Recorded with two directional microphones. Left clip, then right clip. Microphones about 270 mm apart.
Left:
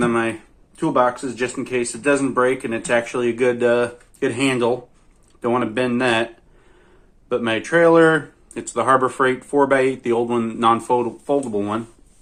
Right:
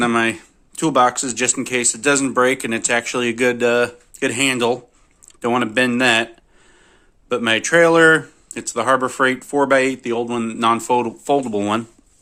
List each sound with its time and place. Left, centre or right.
0.0 s speech: right
7.3 s speech: right